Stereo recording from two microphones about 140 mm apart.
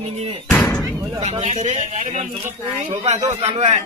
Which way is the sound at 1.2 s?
50° right (ahead or behind).